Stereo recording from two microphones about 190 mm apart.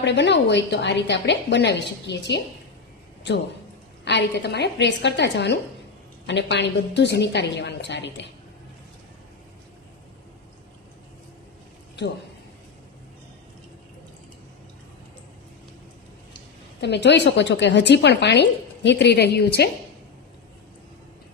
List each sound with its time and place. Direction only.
0.0 s a woman's voice: 65° left (ahead or behind)
4.0 s a woman's voice: 65° left (ahead or behind)
16.8 s a woman's voice: 65° left (ahead or behind)